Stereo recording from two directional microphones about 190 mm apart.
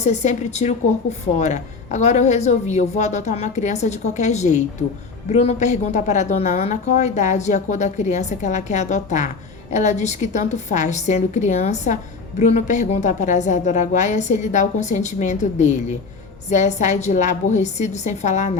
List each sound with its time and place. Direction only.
0.0 s a woman's voice: 35° left (ahead or behind)